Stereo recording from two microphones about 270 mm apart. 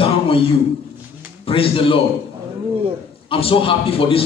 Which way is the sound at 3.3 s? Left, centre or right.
Left.